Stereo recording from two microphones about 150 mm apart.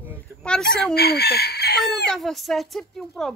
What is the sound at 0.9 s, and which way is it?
Chicken, 90° left.